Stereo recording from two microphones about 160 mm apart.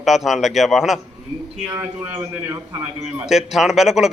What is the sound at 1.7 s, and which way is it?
A man's voice, 15° right (ahead or behind).